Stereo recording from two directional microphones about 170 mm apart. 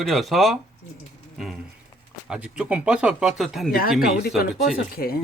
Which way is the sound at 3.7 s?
60° left (ahead or behind).